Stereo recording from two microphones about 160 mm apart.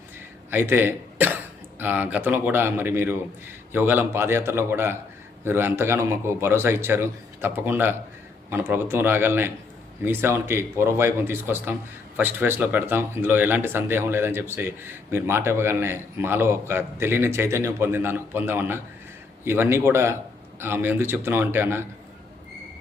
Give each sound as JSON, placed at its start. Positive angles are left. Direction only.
{"t": 0.5, "sound": "speech", "side_deg": -15}